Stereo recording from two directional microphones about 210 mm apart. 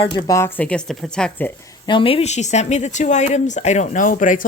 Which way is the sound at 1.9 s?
25° left (ahead or behind).